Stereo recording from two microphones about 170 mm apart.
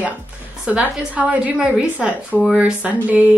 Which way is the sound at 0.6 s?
5° right (ahead or behind).